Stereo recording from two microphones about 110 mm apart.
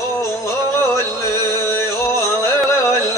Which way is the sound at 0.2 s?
25° left (ahead or behind).